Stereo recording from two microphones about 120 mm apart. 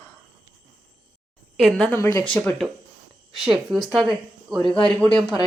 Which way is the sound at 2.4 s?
15° left (ahead or behind).